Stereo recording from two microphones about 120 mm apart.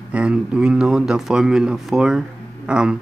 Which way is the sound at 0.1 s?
10° right (ahead or behind).